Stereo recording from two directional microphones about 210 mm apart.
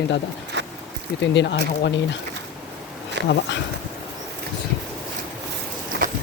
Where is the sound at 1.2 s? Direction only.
60° left (ahead or behind).